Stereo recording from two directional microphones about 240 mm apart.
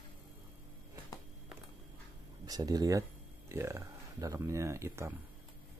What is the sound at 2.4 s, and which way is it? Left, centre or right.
Speech, centre.